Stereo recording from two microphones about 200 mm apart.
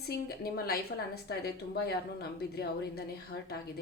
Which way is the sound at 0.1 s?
50° left (ahead or behind).